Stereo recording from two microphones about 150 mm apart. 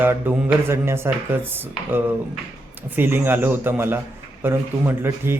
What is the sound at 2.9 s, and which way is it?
Speech, 15° right (ahead or behind).